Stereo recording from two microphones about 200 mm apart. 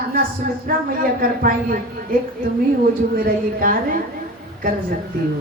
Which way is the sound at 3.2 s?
45° right (ahead or behind).